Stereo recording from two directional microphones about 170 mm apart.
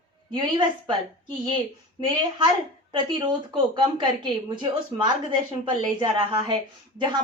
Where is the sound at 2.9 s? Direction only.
25° right (ahead or behind).